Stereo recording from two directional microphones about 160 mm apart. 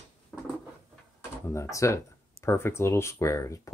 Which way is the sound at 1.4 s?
15° left (ahead or behind).